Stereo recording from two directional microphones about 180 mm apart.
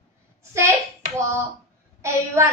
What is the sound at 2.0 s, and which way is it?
Speech, 15° right (ahead or behind).